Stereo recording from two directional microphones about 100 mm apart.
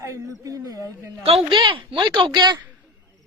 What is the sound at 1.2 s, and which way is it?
Speech, 75° right (ahead or behind).